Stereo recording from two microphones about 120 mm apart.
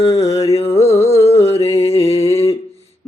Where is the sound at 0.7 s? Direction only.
60° left (ahead or behind).